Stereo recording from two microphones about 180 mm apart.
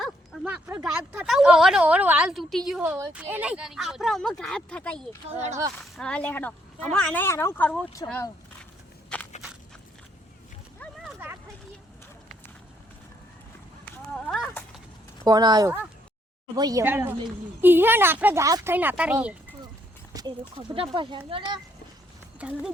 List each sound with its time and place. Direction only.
0.0 s speech: 10° right (ahead or behind); by 8.3 s 10° left (ahead or behind)
9.1 s walk: 5° left (ahead or behind)
14.3 s a sound: 5° left (ahead or behind)
15.2 s speech: 20° right (ahead or behind)
16.8 s speech: 10° right (ahead or behind)
20.1 s a sound: 20° right (ahead or behind)
20.6 s speech: 30° right (ahead or behind)
22.4 s speech: 5° right (ahead or behind)